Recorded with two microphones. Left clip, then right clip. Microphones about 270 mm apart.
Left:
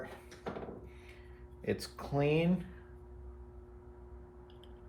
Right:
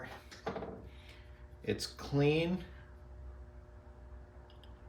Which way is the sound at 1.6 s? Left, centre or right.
Centre.